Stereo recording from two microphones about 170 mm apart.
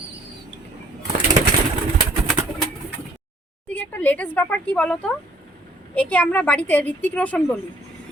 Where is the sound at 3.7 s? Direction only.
10° left (ahead or behind).